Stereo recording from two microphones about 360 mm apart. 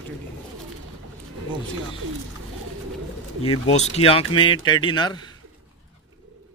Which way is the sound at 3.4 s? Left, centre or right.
Centre.